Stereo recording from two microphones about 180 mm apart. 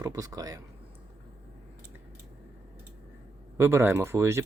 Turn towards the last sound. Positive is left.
turn(degrees=-15)  # may be behind; listen again after turning